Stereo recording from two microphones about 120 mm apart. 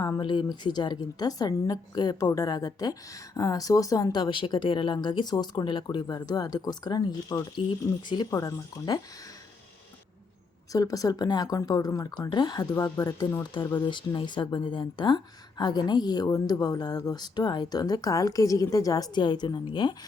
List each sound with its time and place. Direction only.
0.2 s speech: 40° left (ahead or behind)
10.7 s speech: 30° left (ahead or behind)